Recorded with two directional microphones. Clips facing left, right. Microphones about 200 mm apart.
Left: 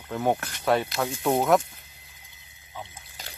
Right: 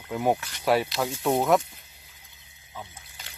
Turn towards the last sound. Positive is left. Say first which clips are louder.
# left 5 dB
turn(degrees=35)  # may be behind; listen again after turning